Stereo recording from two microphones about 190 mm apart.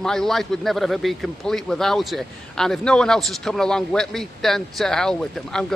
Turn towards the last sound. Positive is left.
turn(degrees=5)  # may be behind; listen again after turning